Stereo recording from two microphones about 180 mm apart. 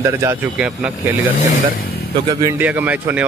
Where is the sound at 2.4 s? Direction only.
10° right (ahead or behind).